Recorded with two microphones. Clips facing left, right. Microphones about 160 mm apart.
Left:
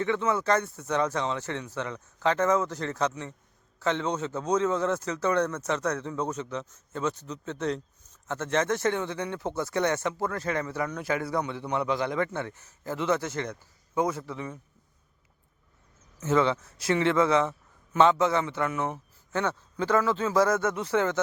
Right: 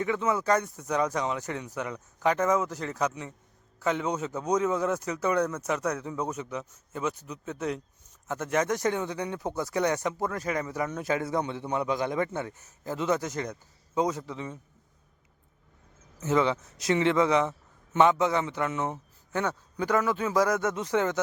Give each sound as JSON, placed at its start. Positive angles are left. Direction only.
{"t": 0.0, "sound": "a man's voice", "side_deg": -15}
{"t": 16.2, "sound": "a man's voice", "side_deg": -15}